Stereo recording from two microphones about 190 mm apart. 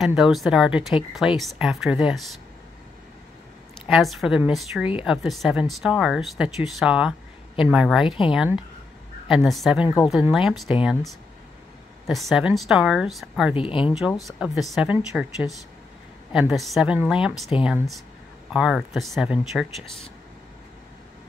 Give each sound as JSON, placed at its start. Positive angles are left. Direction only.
{"t": 0.0, "sound": "speech", "side_deg": 0}
{"t": 3.8, "sound": "speech", "side_deg": 0}
{"t": 9.3, "sound": "speech", "side_deg": 0}
{"t": 12.1, "sound": "speech", "side_deg": 0}
{"t": 13.6, "sound": "speech", "side_deg": 25}
{"t": 13.8, "sound": "speech", "side_deg": -5}
{"t": 17.5, "sound": "speech", "side_deg": 30}
{"t": 18.5, "sound": "speech", "side_deg": -5}